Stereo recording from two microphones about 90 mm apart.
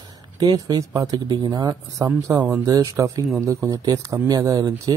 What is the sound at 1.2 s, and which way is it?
Speech, 55° right (ahead or behind).